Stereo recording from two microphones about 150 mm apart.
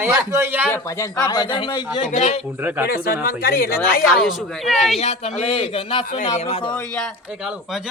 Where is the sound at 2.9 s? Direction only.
85° left.